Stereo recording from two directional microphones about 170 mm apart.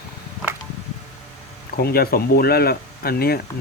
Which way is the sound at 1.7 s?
65° left (ahead or behind).